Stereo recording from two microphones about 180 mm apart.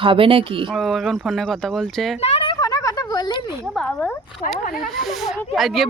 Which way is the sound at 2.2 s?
30° left (ahead or behind).